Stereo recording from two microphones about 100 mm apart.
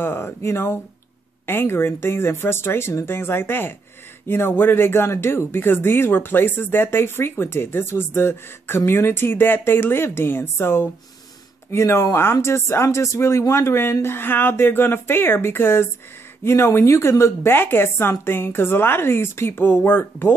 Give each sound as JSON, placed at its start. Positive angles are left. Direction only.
{"t": 0.0, "sound": "speech", "side_deg": 20}